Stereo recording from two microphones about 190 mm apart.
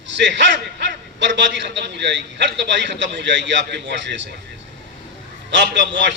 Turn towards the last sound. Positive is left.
turn(degrees=-70)  # may be behind; listen again after turning